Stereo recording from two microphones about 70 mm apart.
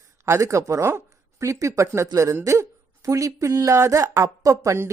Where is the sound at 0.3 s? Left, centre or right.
Right.